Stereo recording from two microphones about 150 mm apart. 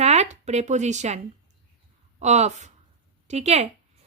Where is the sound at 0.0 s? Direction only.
45° right (ahead or behind).